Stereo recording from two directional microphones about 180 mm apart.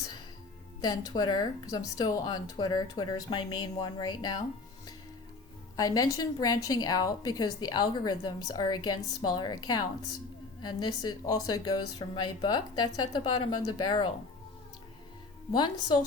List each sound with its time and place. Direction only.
0.9 s a woman's voice: 20° left (ahead or behind)
5.7 s a woman's voice: 20° left (ahead or behind)
15.5 s a woman's voice: 25° left (ahead or behind)